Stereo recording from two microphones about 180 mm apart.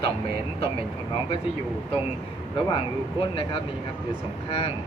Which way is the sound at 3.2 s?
30° left (ahead or behind).